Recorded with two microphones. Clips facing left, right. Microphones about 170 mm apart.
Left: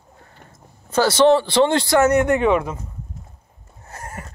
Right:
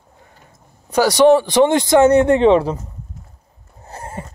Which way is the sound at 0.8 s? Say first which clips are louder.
Right 3 dB; 15° right (ahead or behind).